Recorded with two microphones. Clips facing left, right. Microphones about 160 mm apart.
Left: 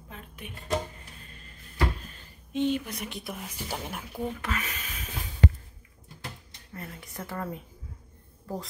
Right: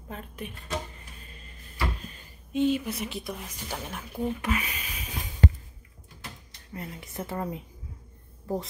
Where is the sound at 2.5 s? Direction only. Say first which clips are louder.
Right 2 dB; 5° right (ahead or behind).